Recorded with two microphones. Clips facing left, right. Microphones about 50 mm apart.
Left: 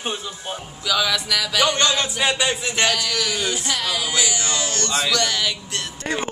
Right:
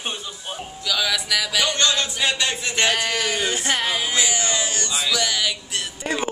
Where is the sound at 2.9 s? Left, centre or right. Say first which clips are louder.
Right 1 dB; right.